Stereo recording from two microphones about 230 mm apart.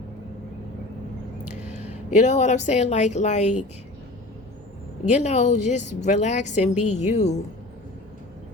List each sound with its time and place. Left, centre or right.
1.9 s speech: left
5.0 s a woman's voice: left